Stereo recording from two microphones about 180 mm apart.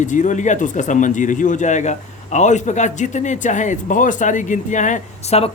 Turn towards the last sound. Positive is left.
turn(degrees=35)  # may be behind; listen again after turning